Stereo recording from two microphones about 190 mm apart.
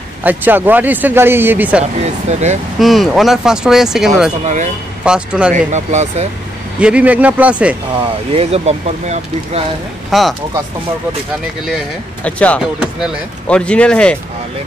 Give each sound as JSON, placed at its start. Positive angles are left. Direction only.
{"t": 0.2, "sound": "speech", "side_deg": -10}
{"t": 2.0, "sound": "speech", "side_deg": -35}
{"t": 2.8, "sound": "speech", "side_deg": 0}
{"t": 5.5, "sound": "speech", "side_deg": -40}
{"t": 6.8, "sound": "speech", "side_deg": -5}
{"t": 8.3, "sound": "speech", "side_deg": -35}
{"t": 10.1, "sound": "speech", "side_deg": 0}
{"t": 11.6, "sound": "speech", "side_deg": 0}